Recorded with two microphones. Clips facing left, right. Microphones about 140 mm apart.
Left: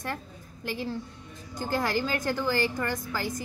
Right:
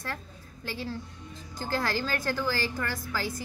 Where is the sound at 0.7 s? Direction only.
15° left (ahead or behind).